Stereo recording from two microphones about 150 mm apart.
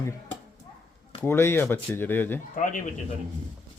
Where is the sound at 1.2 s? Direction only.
15° left (ahead or behind).